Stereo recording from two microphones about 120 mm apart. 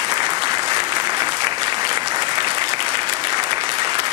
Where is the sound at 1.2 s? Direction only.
60° right (ahead or behind).